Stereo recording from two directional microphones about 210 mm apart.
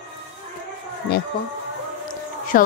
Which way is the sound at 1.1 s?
50° left (ahead or behind).